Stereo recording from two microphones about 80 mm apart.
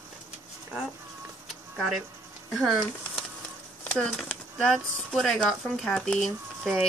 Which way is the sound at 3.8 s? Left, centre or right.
Centre.